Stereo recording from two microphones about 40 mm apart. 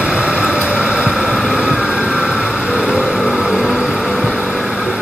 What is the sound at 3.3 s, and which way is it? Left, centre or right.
Vehicle, centre.